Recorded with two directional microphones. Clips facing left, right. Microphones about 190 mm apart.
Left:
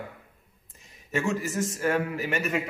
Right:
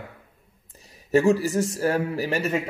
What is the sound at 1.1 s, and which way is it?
A man's voice, 35° right (ahead or behind).